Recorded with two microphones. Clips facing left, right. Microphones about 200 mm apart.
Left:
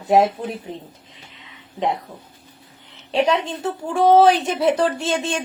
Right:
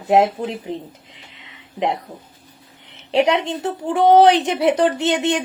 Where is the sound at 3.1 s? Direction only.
25° right (ahead or behind).